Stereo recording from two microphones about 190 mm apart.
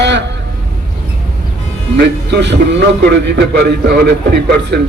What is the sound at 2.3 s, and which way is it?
A man's voice, 65° right (ahead or behind).